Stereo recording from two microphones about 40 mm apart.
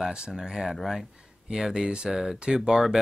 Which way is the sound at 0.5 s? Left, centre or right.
Centre.